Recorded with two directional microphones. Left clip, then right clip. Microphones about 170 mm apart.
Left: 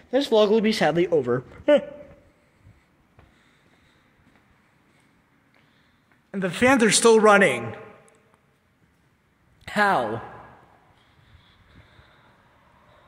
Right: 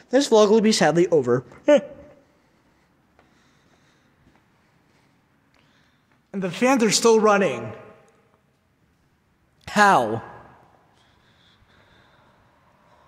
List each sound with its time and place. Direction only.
0.1 s speech: 35° right (ahead or behind); by 1.9 s 15° right (ahead or behind)
6.3 s a man's voice: 5° right (ahead or behind)
9.7 s speech: 30° right (ahead or behind)